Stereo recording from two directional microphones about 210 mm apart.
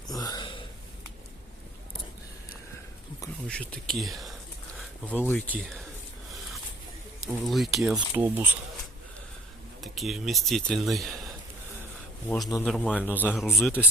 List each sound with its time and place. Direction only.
0.1 s a sound: 20° left (ahead or behind)
3.4 s speech: 5° left (ahead or behind)
7.3 s speech: centre (ahead or behind)
9.8 s speech: centre (ahead or behind)
12.6 s speech: 5° left (ahead or behind)